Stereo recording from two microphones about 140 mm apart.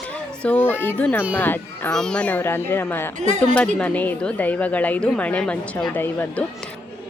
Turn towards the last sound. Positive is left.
turn(degrees=15)  # may be behind; listen again after turning